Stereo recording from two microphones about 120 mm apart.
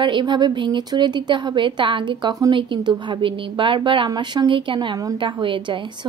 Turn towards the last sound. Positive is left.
turn(degrees=-45)  # may be behind; listen again after turning